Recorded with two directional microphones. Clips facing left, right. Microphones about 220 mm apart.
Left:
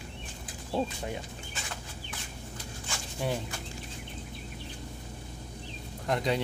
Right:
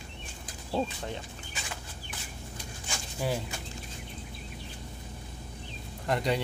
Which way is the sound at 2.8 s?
5° right (ahead or behind).